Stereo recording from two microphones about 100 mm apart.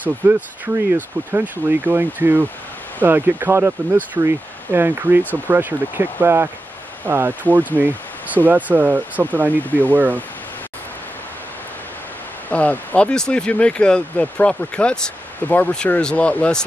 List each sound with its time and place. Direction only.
0.0 s speech: 20° right (ahead or behind)
9.6 s speech: 15° left (ahead or behind)
9.8 s speech: 20° right (ahead or behind)
12.4 s speech: 15° left (ahead or behind)